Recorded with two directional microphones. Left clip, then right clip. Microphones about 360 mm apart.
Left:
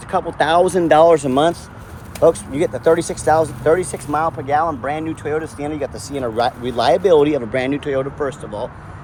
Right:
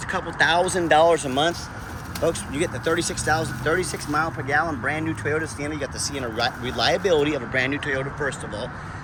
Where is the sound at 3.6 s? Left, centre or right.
Centre.